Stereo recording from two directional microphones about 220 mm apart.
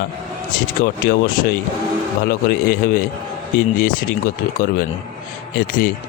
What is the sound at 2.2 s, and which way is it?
Speech, 45° left (ahead or behind).